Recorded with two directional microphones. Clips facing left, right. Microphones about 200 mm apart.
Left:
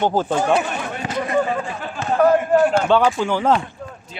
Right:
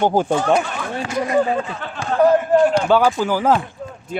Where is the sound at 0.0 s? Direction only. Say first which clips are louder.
Right 2 dB; 15° right (ahead or behind).